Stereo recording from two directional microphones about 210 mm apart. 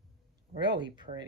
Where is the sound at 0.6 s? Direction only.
20° right (ahead or behind).